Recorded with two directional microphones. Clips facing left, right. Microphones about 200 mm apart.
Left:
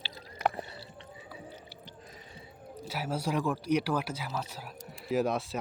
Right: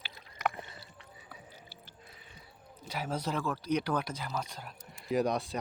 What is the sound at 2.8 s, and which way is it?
Speech, 5° left (ahead or behind).